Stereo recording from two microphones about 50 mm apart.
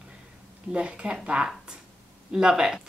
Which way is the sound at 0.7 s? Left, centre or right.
Centre.